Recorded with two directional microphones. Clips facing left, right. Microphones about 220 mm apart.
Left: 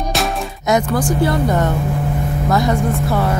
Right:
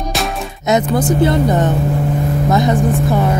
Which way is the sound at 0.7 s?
20° right (ahead or behind).